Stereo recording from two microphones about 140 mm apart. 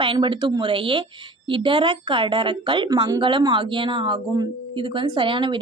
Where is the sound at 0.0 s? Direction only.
35° right (ahead or behind).